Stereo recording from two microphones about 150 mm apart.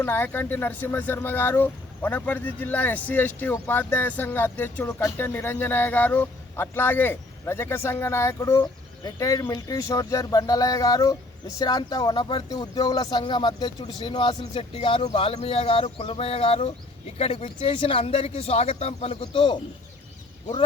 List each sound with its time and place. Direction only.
0.0 s speech: 15° left (ahead or behind); by 19.5 s 35° left (ahead or behind)